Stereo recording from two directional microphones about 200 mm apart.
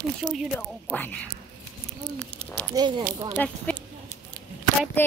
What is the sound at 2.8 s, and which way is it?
Speech, 25° right (ahead or behind).